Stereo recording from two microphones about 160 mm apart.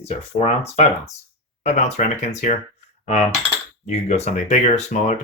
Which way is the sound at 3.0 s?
45° left (ahead or behind).